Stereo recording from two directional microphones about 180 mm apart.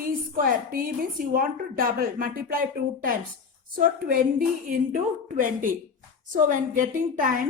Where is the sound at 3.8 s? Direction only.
50° right (ahead or behind).